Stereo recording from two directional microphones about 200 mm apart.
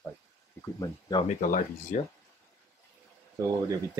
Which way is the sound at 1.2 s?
40° left (ahead or behind).